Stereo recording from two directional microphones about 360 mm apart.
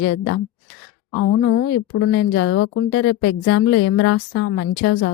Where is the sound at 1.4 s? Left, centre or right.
Left.